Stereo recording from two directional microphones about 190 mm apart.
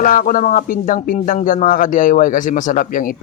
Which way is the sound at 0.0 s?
45° left (ahead or behind).